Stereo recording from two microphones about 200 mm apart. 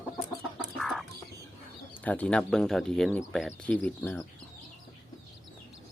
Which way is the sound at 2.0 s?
5° left (ahead or behind).